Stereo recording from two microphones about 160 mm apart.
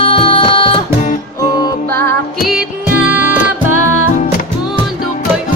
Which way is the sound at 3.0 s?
10° right (ahead or behind).